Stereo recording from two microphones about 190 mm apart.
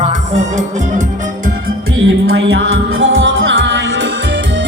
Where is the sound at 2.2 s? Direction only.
75° right (ahead or behind).